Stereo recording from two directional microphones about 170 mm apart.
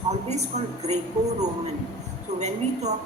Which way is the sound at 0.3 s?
40° right (ahead or behind).